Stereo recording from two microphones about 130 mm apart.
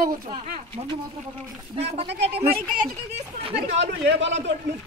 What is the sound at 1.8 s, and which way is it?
Speech, 50° right (ahead or behind).